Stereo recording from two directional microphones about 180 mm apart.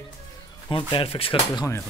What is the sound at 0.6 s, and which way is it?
Speech, 25° left (ahead or behind).